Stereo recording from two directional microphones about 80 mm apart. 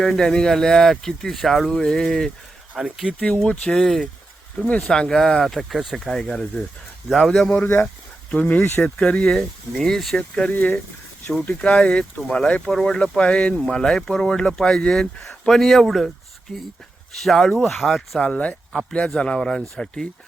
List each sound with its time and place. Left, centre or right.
0.0 s speech: centre
2.7 s speech: centre
3.1 s speech: centre
8.3 s speech: centre
10.2 s speech: centre
11.3 s speech: centre
18.2 s speech: centre